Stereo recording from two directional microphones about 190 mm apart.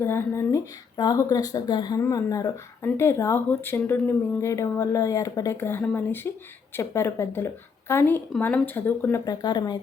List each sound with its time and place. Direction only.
0.0 s a woman's voice: 15° left (ahead or behind)